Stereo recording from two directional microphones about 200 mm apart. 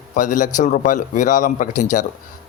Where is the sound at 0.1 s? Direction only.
40° left (ahead or behind).